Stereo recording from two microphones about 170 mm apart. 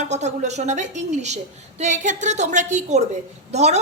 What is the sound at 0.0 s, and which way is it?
A woman's voice, 40° right (ahead or behind).